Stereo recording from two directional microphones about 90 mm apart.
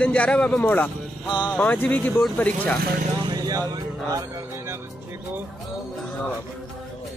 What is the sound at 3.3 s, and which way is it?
Speech, 45° right (ahead or behind).